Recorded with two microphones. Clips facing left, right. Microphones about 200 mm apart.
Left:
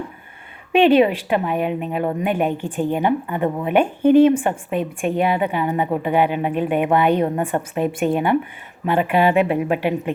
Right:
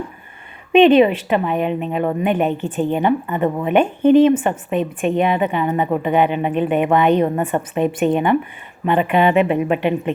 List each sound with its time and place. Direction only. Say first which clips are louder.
0.7 s a woman's voice: right 3 dB; 10° left (ahead or behind)